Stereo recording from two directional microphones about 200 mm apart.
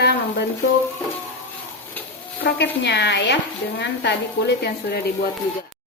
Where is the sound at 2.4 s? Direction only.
60° left (ahead or behind).